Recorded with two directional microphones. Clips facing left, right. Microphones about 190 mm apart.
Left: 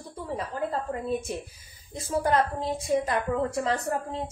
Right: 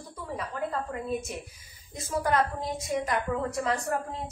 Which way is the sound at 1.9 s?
30° left (ahead or behind).